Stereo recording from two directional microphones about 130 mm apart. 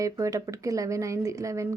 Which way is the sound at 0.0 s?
25° right (ahead or behind).